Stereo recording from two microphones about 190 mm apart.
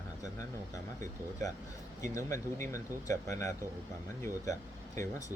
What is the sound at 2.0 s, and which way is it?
Speech, 15° left (ahead or behind).